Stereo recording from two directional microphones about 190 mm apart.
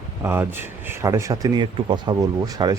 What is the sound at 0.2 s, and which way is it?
Speech, 10° right (ahead or behind).